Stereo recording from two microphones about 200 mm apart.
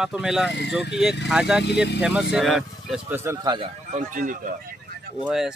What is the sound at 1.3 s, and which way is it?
Speech, 5° right (ahead or behind).